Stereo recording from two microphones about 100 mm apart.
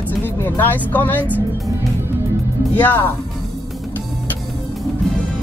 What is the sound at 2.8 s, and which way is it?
Speech, 15° left (ahead or behind).